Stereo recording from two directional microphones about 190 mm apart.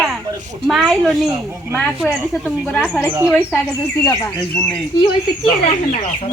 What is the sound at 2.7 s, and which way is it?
Speech, 5° left (ahead or behind).